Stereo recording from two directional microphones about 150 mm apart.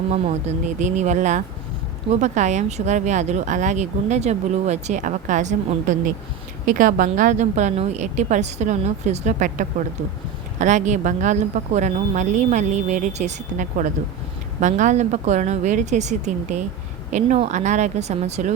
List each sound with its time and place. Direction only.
0.1 s a woman's voice: 50° right (ahead or behind)